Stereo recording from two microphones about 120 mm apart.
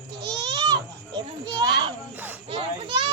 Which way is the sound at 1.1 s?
35° right (ahead or behind).